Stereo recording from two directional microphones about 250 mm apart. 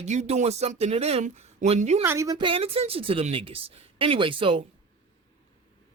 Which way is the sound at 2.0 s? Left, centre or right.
Centre.